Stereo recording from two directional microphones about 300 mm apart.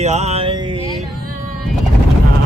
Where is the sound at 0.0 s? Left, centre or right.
Right.